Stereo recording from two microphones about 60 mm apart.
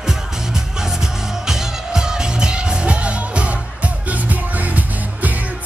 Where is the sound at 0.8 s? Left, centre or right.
Centre.